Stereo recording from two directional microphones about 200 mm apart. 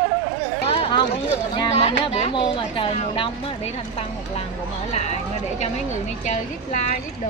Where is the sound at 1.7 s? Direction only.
30° left (ahead or behind).